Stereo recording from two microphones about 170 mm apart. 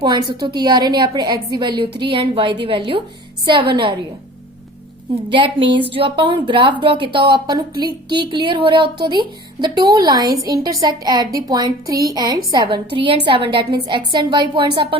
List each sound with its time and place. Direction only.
0.0 s a woman's voice: 25° right (ahead or behind)
5.3 s a woman's voice: 30° right (ahead or behind)